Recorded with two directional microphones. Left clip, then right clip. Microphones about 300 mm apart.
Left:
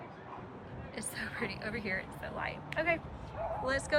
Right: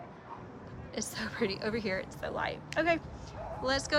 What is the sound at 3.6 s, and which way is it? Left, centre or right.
Speech, centre.